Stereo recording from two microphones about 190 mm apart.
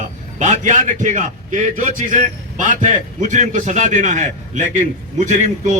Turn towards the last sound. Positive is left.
turn(degrees=-40)  # may be behind; listen again after turning